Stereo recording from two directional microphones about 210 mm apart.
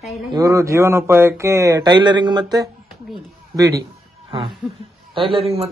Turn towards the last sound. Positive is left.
turn(degrees=-25)  # may be behind; listen again after turning